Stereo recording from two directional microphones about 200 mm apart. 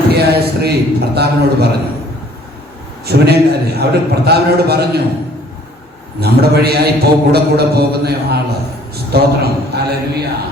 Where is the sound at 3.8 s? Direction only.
55° right (ahead or behind).